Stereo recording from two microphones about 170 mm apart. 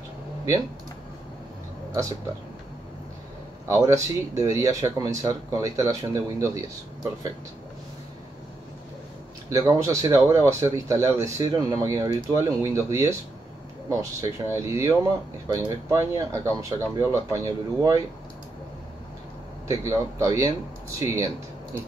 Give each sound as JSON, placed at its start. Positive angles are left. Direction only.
{"t": 3.6, "sound": "speech", "side_deg": -15}
{"t": 9.5, "sound": "speech", "side_deg": -20}
{"t": 19.7, "sound": "speech", "side_deg": -15}